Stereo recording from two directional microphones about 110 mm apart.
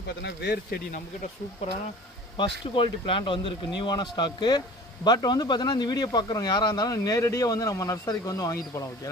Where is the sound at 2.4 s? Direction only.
50° left (ahead or behind).